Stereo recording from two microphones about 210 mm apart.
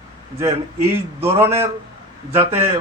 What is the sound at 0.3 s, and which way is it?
A man's voice, 15° right (ahead or behind).